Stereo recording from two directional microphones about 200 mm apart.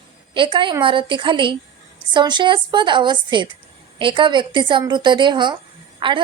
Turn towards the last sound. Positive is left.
turn(degrees=-25)  # may be behind; listen again after turning